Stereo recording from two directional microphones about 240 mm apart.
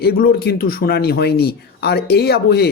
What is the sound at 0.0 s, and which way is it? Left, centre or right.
A man's voice, left.